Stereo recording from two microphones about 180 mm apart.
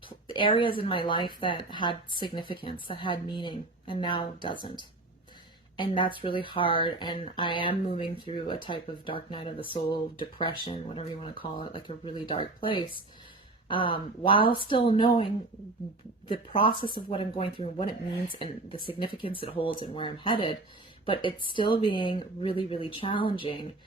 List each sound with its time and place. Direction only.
0.3 s speech: 30° left (ahead or behind)
16.3 s speech: 30° left (ahead or behind)